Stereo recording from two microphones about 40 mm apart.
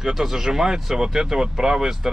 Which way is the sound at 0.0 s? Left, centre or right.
Centre.